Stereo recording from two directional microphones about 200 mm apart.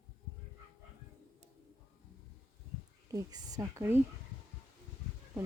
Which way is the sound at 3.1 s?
20° right (ahead or behind).